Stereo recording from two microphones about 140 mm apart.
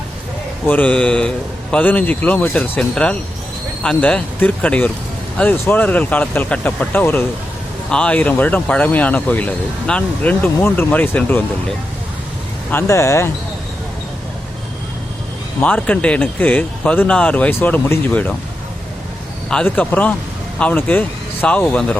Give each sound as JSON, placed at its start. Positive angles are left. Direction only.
{"t": 0.7, "sound": "speech", "side_deg": 10}
{"t": 12.7, "sound": "speech", "side_deg": 20}
{"t": 15.6, "sound": "speech", "side_deg": 10}
{"t": 19.5, "sound": "speech", "side_deg": 10}